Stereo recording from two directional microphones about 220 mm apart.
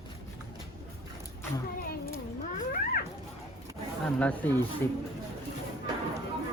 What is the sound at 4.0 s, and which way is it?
Speech, 5° left (ahead or behind).